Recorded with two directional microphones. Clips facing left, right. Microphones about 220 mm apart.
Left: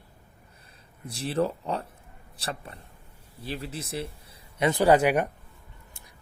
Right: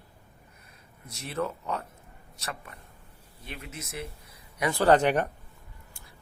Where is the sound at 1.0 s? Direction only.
30° left (ahead or behind).